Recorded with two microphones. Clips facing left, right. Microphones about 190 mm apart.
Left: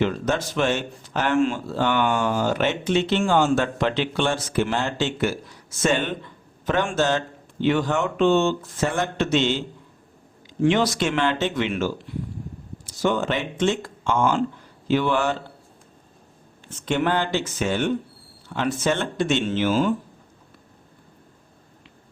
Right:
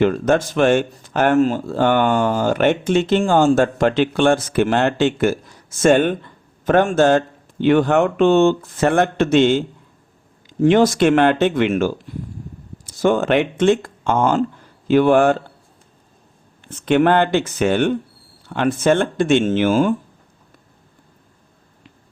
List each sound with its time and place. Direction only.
0.0 s a man's voice: 50° right (ahead or behind)
16.6 s a man's voice: 60° right (ahead or behind)